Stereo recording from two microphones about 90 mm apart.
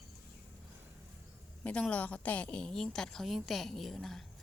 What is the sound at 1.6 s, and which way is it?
A woman's voice, 15° left (ahead or behind).